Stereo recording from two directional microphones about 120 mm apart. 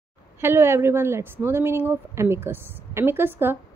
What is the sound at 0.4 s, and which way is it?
A woman's voice, 20° right (ahead or behind).